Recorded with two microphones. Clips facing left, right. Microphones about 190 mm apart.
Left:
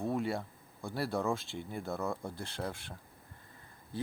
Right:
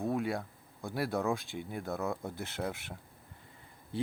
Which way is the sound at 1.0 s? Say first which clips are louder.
Right 1 dB; centre (ahead or behind).